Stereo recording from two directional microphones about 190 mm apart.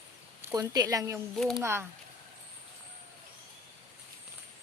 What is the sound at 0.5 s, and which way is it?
Speech, 20° right (ahead or behind).